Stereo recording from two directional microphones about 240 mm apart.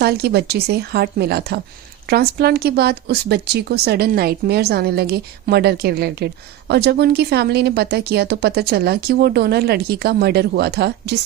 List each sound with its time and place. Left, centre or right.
0.0 s speech: right